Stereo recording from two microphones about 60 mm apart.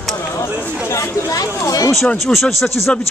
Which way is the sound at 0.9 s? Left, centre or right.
Left.